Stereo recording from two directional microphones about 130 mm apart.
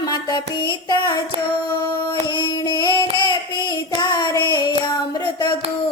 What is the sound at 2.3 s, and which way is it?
Child singing, 35° left (ahead or behind).